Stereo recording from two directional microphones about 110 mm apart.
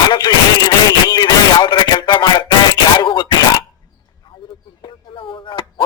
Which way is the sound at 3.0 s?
45° left (ahead or behind).